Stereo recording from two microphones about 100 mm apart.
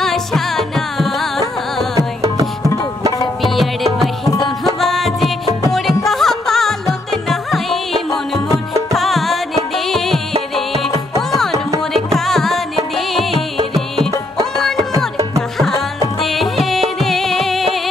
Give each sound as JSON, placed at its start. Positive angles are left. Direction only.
{"t": 0.0, "sound": "music", "side_deg": 5}
{"t": 2.0, "sound": "music", "side_deg": -35}
{"t": 3.4, "sound": "music", "side_deg": 0}
{"t": 11.9, "sound": "music", "side_deg": 5}
{"t": 15.5, "sound": "music", "side_deg": 5}